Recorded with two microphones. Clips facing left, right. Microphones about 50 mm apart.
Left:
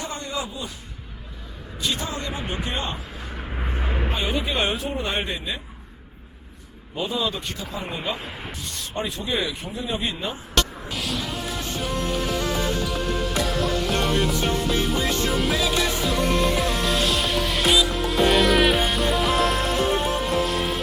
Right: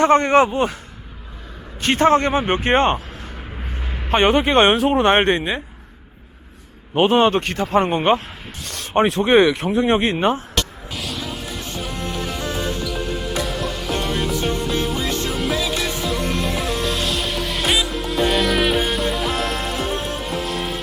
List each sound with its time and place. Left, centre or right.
0.0 s a man's voice: right
1.8 s a man's voice: right
3.6 s vehicle: centre
4.1 s speech: right
6.9 s speech: right
10.5 s music: centre